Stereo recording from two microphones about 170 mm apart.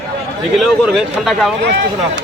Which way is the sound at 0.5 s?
Centre (ahead or behind).